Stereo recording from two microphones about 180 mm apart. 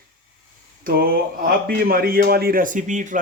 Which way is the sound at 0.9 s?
55° right (ahead or behind).